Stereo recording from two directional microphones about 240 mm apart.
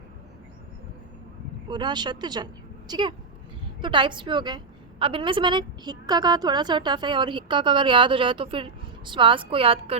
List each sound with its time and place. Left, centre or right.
1.7 s a woman's voice: centre